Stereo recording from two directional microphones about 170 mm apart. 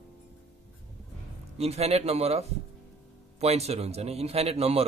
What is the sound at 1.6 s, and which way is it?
A man's voice, 35° right (ahead or behind).